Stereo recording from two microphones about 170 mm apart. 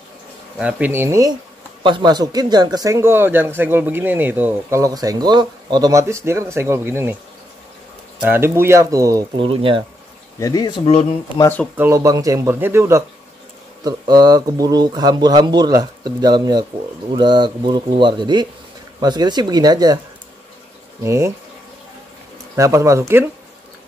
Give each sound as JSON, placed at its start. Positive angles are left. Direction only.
{"t": 0.6, "sound": "speech", "side_deg": -10}
{"t": 1.8, "sound": "speech", "side_deg": -30}
{"t": 8.3, "sound": "speech", "side_deg": -15}
{"t": 9.4, "sound": "speech", "side_deg": -30}
{"t": 10.4, "sound": "speech", "side_deg": 20}
{"t": 11.7, "sound": "speech", "side_deg": -15}
{"t": 21.0, "sound": "speech", "side_deg": -15}
{"t": 22.6, "sound": "speech", "side_deg": -20}